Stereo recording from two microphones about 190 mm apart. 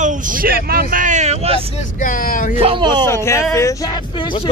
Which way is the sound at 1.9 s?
45° left (ahead or behind).